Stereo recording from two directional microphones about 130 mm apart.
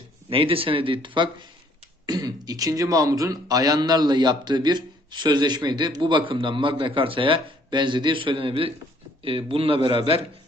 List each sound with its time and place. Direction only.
0.3 s speech: 45° right (ahead or behind)